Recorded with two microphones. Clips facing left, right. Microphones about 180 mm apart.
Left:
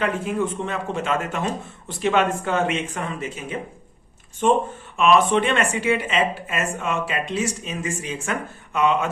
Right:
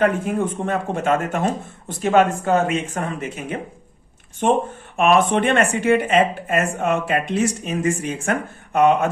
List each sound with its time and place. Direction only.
0.0 s speech: 50° right (ahead or behind)